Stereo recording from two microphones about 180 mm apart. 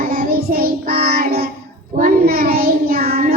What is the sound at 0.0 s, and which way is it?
Child singing, 55° right (ahead or behind).